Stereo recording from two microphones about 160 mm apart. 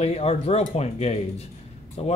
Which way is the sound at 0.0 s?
40° left (ahead or behind).